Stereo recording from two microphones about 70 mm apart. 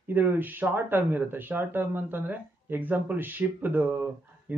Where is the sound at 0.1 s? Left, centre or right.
Right.